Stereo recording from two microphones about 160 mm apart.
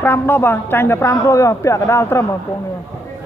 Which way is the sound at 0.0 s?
15° left (ahead or behind).